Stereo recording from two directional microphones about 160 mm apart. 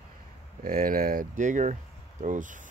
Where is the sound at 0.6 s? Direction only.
60° right (ahead or behind).